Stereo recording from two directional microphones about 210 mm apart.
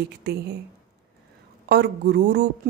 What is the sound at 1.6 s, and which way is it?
Speech, 50° right (ahead or behind).